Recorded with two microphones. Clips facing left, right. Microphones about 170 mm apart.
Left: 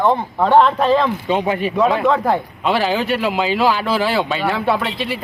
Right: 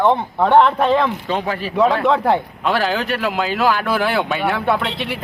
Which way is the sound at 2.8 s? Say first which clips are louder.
Left 3 dB; centre (ahead or behind).